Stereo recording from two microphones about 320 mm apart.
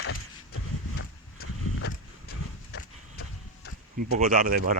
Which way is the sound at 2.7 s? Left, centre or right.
Left.